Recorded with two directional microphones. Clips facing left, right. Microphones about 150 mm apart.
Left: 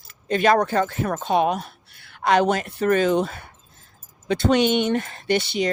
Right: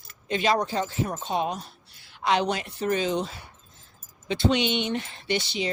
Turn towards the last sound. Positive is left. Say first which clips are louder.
# left 6 dB
turn(degrees=50)  # may be behind; listen again after turning